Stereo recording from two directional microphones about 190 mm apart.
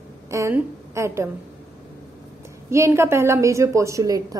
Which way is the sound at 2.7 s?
15° right (ahead or behind).